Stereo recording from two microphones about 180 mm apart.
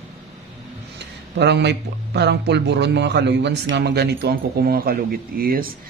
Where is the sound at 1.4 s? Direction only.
70° right (ahead or behind).